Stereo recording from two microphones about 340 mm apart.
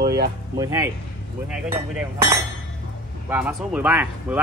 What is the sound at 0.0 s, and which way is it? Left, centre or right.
Speech, right.